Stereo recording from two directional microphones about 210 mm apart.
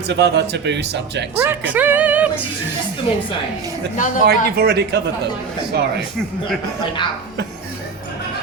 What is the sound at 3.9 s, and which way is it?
Speech, 35° left (ahead or behind).